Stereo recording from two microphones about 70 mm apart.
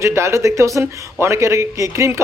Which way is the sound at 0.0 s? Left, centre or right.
Right.